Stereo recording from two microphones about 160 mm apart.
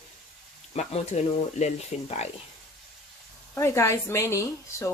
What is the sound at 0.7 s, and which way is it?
Speech, 45° left (ahead or behind).